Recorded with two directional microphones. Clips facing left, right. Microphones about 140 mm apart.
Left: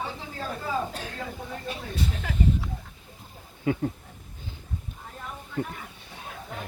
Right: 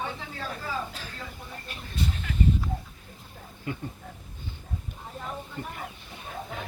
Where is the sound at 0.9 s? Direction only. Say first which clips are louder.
Left 5 dB; 60° left (ahead or behind).